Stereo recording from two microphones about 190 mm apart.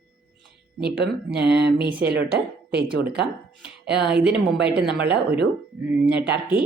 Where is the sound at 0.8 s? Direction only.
60° right (ahead or behind).